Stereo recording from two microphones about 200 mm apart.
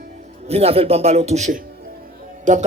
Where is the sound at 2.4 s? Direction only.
40° right (ahead or behind).